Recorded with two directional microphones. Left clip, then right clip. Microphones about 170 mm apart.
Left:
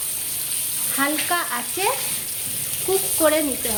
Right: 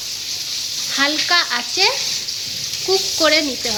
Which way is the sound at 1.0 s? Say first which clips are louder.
Right 6 dB; 5° right (ahead or behind).